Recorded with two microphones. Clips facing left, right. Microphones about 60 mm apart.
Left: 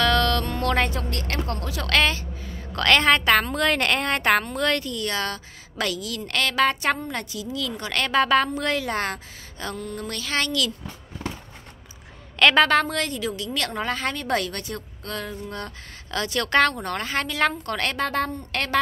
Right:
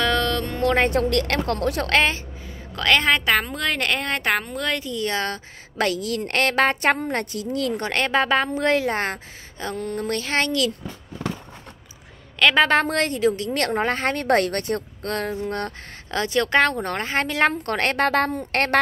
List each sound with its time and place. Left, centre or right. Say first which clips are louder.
0.0 s music: left 1 dB; centre
0.9 s speech: right 8 dB; right
1.9 s a woman's voice: even; right
2.4 s a woman's voice: even; centre
4.9 s a woman's voice: right 2 dB; right
7.9 s a woman's voice: left 2 dB; right
9.8 s a woman's voice: right 6 dB; right
12.4 s a woman's voice: even; centre
12.8 s a woman's voice: right 6 dB; right
16.1 s a woman's voice: right 3 dB; right
17.9 s speech: right 5 dB; right